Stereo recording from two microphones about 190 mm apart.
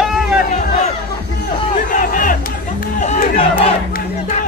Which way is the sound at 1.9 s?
45° left (ahead or behind).